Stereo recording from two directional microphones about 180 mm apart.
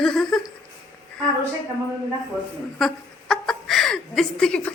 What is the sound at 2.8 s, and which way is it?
Chuckle, centre (ahead or behind).